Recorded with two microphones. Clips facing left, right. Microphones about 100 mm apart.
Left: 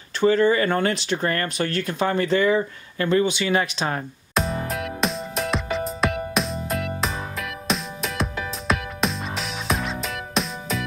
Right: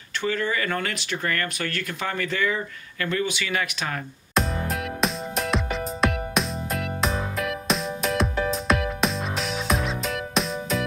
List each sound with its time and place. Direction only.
0.2 s speech: 30° left (ahead or behind)
4.4 s music: centre (ahead or behind)